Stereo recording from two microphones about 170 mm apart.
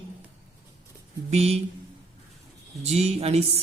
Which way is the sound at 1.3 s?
35° right (ahead or behind).